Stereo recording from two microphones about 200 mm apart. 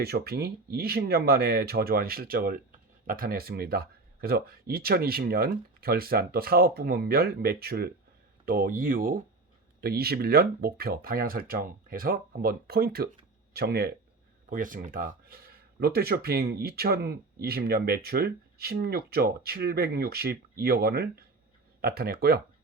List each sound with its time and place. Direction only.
0.0 s speech: 55° right (ahead or behind)